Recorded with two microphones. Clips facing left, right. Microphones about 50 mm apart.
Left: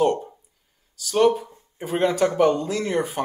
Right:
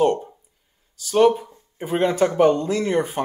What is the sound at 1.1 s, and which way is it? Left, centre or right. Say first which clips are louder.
Speech: right 2 dB; centre.